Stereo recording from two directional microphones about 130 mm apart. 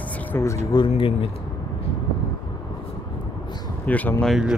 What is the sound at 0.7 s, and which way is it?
Speech, 45° left (ahead or behind).